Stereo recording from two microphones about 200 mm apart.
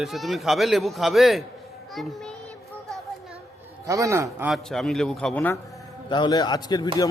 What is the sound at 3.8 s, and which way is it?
A man's voice, 15° right (ahead or behind).